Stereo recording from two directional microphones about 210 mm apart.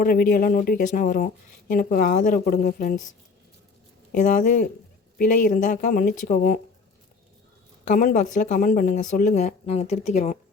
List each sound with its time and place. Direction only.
0.0 s speech: 40° left (ahead or behind)
4.1 s speech: 35° left (ahead or behind)
7.9 s speech: 40° left (ahead or behind)